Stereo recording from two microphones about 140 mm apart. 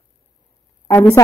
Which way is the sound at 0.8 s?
20° left (ahead or behind).